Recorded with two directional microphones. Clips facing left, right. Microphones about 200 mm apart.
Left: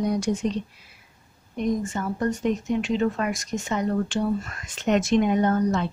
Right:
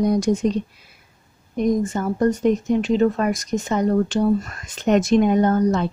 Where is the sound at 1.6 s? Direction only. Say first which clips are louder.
Right 5 dB; 40° right (ahead or behind).